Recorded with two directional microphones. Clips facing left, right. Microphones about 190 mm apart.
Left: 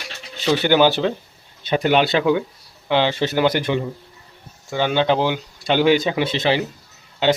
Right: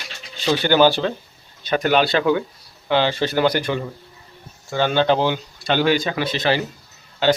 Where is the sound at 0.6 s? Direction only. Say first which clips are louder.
Even; 20° left (ahead or behind).